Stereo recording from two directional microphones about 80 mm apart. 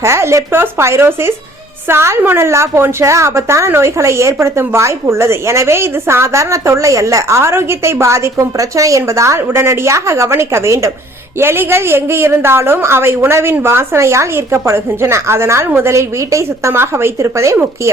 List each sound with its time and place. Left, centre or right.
0.0 s a woman's voice: right